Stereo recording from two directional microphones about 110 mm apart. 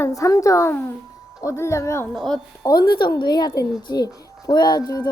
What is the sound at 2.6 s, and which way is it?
Speech, 35° left (ahead or behind).